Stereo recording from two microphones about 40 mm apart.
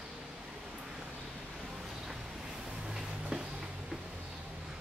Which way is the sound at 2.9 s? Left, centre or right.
Centre.